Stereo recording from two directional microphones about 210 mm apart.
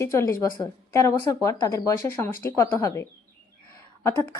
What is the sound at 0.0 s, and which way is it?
Speech, 15° left (ahead or behind).